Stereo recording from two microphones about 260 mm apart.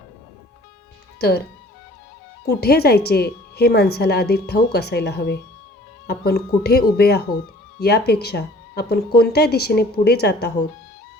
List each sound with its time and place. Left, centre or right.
2.5 s a woman's voice: left